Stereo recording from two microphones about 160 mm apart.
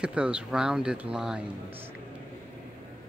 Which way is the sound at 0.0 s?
5° right (ahead or behind).